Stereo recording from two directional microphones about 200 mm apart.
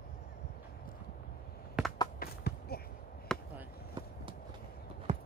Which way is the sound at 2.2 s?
50° left (ahead or behind).